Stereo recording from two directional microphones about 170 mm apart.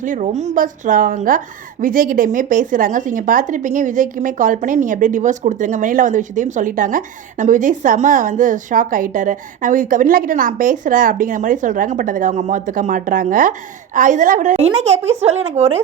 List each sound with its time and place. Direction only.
0.0 s speech: 45° right (ahead or behind)